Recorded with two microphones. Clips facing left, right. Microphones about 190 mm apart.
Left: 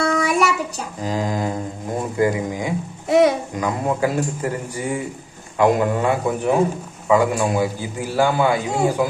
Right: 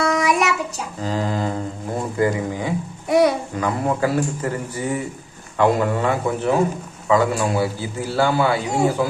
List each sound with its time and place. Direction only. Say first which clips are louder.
0.0 s child singing: even; 30° left (ahead or behind)
1.0 s a man's voice: even; 15° left (ahead or behind)